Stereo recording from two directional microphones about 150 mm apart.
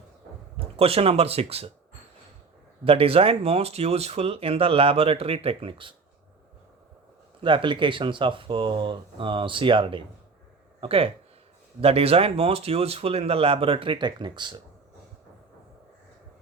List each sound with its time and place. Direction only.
0.5 s speech: 40° right (ahead or behind)
2.8 s speech: 40° right (ahead or behind)
7.4 s speech: 35° right (ahead or behind)